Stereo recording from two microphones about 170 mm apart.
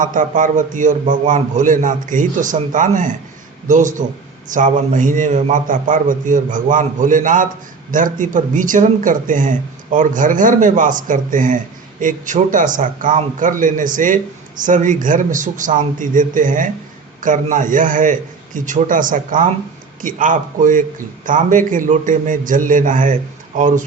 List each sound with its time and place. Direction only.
0.0 s speech: 50° right (ahead or behind)